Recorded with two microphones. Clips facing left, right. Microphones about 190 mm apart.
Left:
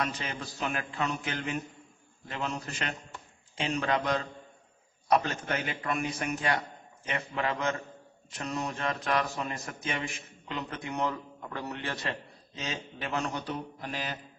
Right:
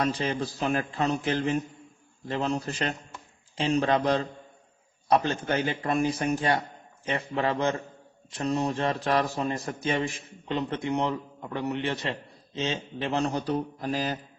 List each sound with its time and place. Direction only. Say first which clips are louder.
0.0 s a man's voice: right 7 dB; 35° right (ahead or behind)